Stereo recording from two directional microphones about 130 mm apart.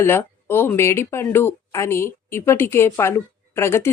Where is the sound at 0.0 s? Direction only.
20° left (ahead or behind).